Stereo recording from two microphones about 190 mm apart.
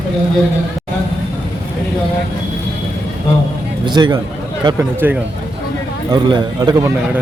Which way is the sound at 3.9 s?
25° right (ahead or behind).